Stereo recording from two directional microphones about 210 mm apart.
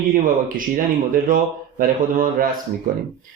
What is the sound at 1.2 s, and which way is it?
Speech, 40° right (ahead or behind).